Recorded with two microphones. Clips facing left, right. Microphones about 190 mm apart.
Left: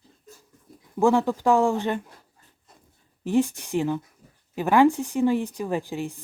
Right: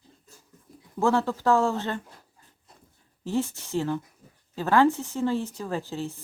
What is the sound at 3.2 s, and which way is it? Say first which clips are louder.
Speech: left 5 dB; 15° left (ahead or behind).